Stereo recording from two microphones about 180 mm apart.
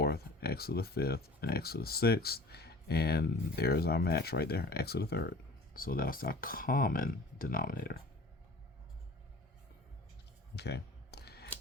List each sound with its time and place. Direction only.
0.0 s speech: 60° left (ahead or behind)
5.7 s speech: 55° left (ahead or behind)
10.5 s a sound: 65° left (ahead or behind)